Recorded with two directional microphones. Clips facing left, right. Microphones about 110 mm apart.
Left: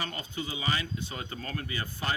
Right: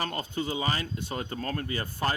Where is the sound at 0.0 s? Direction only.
45° right (ahead or behind).